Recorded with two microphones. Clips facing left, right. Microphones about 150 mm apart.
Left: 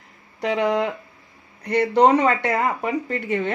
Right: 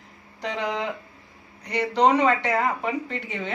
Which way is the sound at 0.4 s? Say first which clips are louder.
Left 7 dB; 55° left (ahead or behind).